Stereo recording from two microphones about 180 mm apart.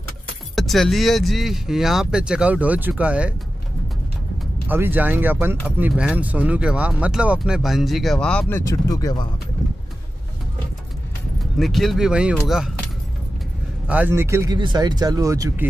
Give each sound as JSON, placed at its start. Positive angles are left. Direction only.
{"t": 0.6, "sound": "speech", "side_deg": 0}
{"t": 4.6, "sound": "speech", "side_deg": -10}
{"t": 11.5, "sound": "speech", "side_deg": 0}
{"t": 13.8, "sound": "speech", "side_deg": -10}